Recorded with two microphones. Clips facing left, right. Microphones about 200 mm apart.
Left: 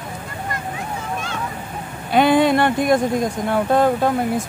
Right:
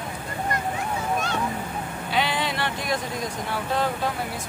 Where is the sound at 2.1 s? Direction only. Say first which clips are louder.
Left 12 dB; 50° left (ahead or behind).